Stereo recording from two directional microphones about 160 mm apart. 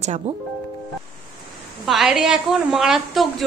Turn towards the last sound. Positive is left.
turn(degrees=0)  # may be behind; listen again after turning